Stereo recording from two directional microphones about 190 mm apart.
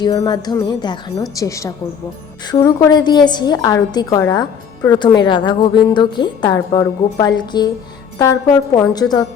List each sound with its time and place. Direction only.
0.0 s a woman's voice: 20° left (ahead or behind)